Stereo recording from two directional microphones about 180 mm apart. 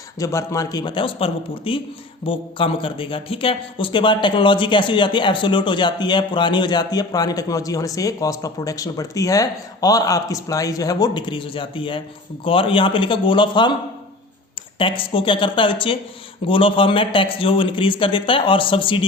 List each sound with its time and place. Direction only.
0.2 s a man's voice: 15° left (ahead or behind)
14.8 s a man's voice: 30° left (ahead or behind)